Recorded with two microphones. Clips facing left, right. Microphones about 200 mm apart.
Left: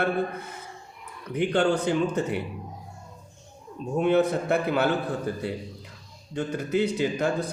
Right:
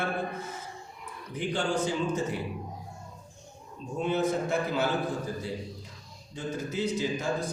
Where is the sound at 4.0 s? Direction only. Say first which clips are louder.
Left 5 dB; 60° left (ahead or behind).